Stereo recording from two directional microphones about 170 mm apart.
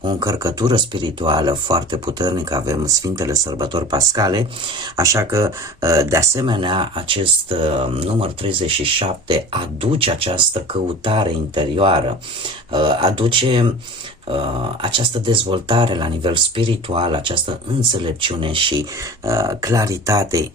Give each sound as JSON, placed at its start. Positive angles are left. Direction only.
{"t": 0.0, "sound": "speech", "side_deg": -25}
{"t": 19.2, "sound": "speech", "side_deg": -20}